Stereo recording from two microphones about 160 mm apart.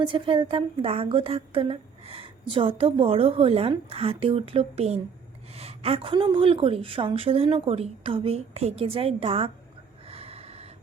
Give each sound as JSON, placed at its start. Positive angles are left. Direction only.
{"t": 0.0, "sound": "a woman's voice", "side_deg": -30}
{"t": 10.1, "sound": "snort", "side_deg": -40}